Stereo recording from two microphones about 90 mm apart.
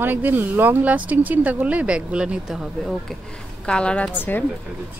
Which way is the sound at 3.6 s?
10° left (ahead or behind).